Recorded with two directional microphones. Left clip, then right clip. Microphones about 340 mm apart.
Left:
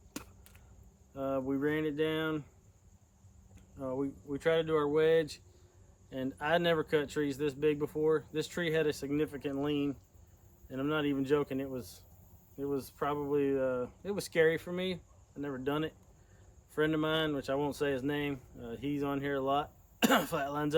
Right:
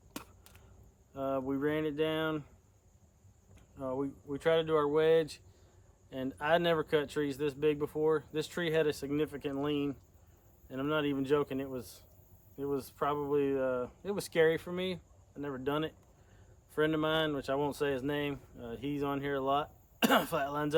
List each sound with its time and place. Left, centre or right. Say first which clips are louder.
0.1 s chop: even; centre
1.1 s speech: even; centre
3.5 s speech: right 1 dB; centre